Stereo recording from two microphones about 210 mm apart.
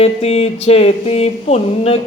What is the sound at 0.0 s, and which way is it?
Mantra, 30° left (ahead or behind).